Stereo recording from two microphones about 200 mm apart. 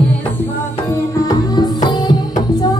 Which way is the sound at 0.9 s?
15° left (ahead or behind).